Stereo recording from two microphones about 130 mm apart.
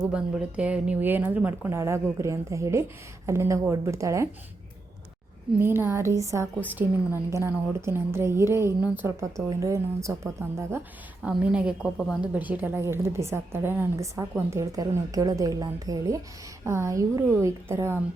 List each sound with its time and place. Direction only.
0.0 s a woman's voice: 10° right (ahead or behind)
5.5 s a woman's voice: 15° right (ahead or behind)
11.2 s a woman's voice: 5° right (ahead or behind)